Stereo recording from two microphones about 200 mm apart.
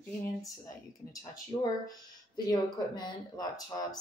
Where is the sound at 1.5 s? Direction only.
30° left (ahead or behind).